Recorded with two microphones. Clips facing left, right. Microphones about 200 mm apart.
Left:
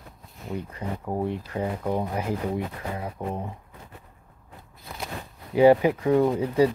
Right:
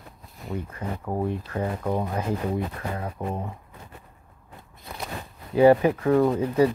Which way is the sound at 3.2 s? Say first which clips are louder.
Right 1 dB; 5° right (ahead or behind).